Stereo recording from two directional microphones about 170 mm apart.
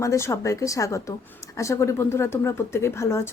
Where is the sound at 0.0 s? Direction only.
15° left (ahead or behind).